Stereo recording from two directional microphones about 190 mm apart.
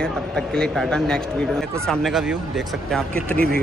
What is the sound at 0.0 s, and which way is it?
A man's voice, 5° left (ahead or behind).